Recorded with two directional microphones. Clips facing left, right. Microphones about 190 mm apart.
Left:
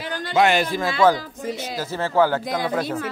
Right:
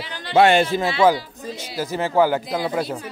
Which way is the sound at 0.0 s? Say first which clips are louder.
Left 5 dB; 45° left (ahead or behind).